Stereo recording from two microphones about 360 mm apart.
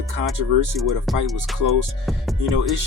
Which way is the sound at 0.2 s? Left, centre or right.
Right.